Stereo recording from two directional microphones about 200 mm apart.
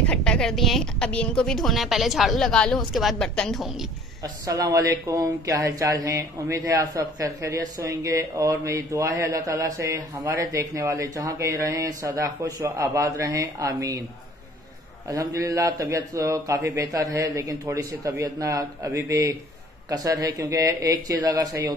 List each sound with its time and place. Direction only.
0.0 s a woman's voice: 5° left (ahead or behind)
4.2 s speech: 15° right (ahead or behind)
15.0 s speech: 15° right (ahead or behind)